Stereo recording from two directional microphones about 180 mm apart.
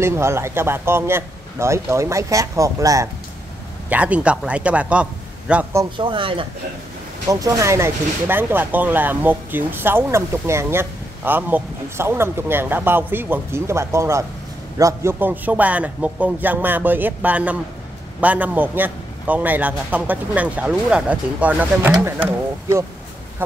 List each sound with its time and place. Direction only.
0.0 s speech: 15° right (ahead or behind)
3.9 s speech: 5° right (ahead or behind)
5.9 s speech: 30° right (ahead or behind); by 21.9 s 10° right (ahead or behind)